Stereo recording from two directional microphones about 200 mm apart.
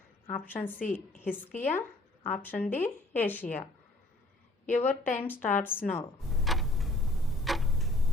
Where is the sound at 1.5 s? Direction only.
40° left (ahead or behind).